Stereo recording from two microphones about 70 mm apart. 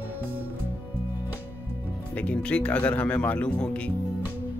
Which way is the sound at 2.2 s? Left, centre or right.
Centre.